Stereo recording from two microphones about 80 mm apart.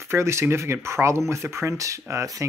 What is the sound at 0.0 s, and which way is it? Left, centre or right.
Speech, right.